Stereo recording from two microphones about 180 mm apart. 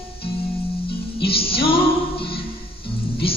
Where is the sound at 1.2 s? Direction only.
30° left (ahead or behind).